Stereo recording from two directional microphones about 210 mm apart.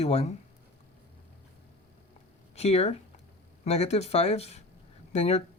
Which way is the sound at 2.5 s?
30° left (ahead or behind).